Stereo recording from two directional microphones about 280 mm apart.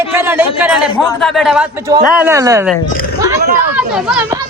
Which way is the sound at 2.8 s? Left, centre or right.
Left.